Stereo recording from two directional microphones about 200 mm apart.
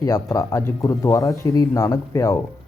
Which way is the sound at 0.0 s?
15° left (ahead or behind).